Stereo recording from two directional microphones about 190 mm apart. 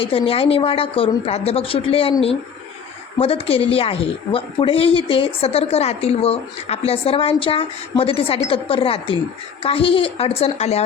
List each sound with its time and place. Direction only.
0.0 s a woman's voice: 30° left (ahead or behind)